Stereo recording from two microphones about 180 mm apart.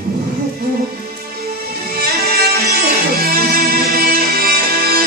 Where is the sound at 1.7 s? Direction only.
60° right (ahead or behind).